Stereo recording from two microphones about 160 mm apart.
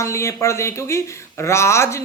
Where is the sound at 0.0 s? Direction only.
20° left (ahead or behind).